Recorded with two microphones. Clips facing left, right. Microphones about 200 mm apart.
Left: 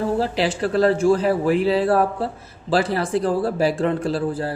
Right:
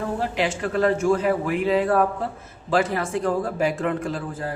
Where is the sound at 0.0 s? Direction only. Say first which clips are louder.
Left 4 dB; 35° left (ahead or behind).